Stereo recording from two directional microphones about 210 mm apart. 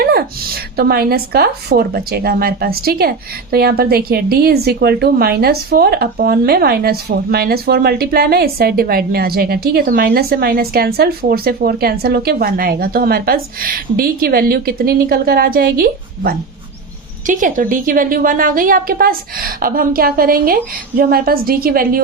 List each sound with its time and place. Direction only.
0.0 s speech: 45° right (ahead or behind)